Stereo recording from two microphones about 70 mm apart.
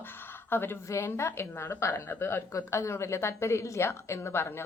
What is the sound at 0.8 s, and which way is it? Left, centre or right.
A woman's voice, left.